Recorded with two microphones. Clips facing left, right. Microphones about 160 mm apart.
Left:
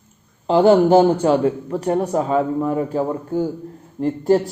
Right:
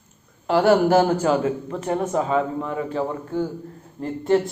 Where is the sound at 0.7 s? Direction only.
30° left (ahead or behind).